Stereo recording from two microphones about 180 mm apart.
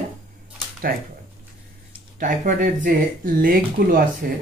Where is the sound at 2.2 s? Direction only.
45° right (ahead or behind).